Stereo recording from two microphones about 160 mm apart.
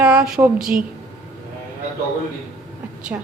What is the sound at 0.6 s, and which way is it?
Speech, 60° right (ahead or behind).